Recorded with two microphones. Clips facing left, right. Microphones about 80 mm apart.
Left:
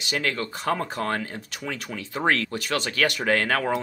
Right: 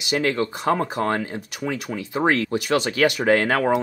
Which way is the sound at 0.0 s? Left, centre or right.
Centre.